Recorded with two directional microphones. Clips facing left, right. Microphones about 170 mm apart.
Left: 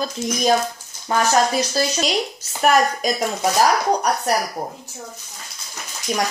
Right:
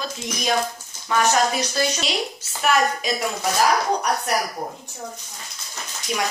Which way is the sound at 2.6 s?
45° left (ahead or behind).